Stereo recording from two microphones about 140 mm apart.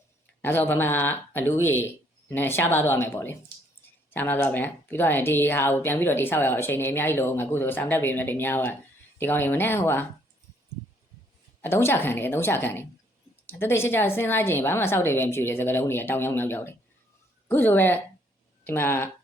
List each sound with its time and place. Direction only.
0.4 s speech: 15° left (ahead or behind)
11.6 s speech: 15° left (ahead or behind)